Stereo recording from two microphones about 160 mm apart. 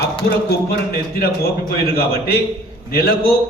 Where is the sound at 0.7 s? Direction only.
75° left (ahead or behind).